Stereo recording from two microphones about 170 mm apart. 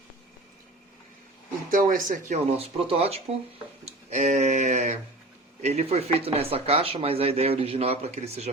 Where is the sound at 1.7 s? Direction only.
50° right (ahead or behind).